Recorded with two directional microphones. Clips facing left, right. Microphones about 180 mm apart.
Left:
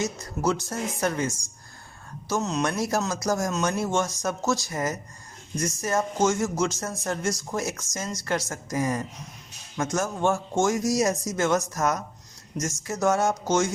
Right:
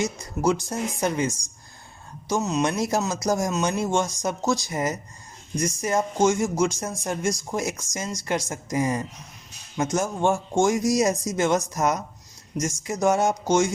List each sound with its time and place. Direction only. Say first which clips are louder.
0.0 s speech: right 3 dB; 15° right (ahead or behind)
2.3 s speech: right 2 dB; 10° right (ahead or behind)